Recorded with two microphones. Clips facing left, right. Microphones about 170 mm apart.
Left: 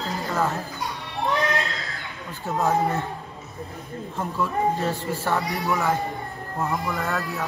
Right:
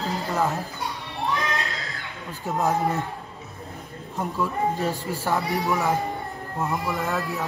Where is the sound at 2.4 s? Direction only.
15° right (ahead or behind).